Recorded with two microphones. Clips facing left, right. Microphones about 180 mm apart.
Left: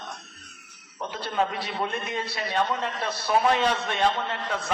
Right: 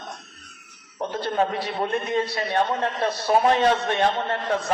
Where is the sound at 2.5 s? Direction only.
50° right (ahead or behind).